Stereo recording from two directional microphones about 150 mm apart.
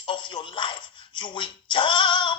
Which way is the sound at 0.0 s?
30° left (ahead or behind).